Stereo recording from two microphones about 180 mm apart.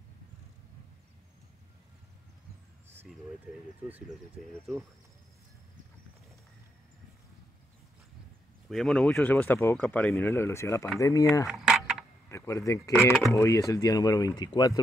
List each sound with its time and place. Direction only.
3.5 s speech: 5° right (ahead or behind)
8.6 s speech: centre (ahead or behind); by 11.4 s 20° left (ahead or behind)
11.4 s keys jangling: centre (ahead or behind)
12.3 s speech: 15° left (ahead or behind)